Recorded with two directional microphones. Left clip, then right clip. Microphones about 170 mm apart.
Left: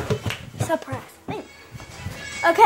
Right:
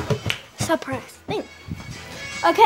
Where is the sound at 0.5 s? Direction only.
20° right (ahead or behind).